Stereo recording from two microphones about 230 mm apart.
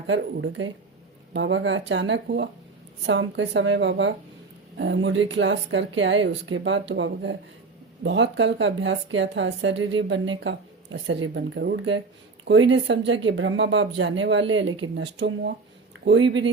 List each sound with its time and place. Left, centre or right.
0.1 s speech: right